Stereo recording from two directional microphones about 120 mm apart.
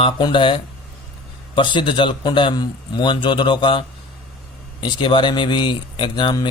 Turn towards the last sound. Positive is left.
turn(degrees=40)  # may be behind; listen again after turning